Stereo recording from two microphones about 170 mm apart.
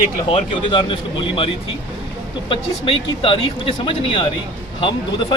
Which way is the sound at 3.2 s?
35° left (ahead or behind).